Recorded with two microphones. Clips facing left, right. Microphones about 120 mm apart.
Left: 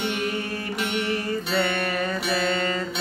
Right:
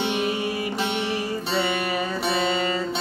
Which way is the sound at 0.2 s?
15° right (ahead or behind).